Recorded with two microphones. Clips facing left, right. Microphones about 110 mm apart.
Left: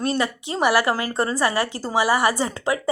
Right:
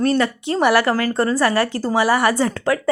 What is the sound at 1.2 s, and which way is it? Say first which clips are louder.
Speech: right 4 dB; 25° left (ahead or behind).